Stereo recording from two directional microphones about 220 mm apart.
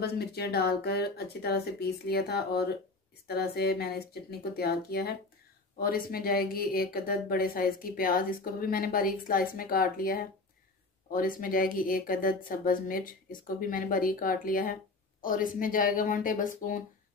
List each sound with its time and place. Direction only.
0.0 s a woman's voice: 45° left (ahead or behind)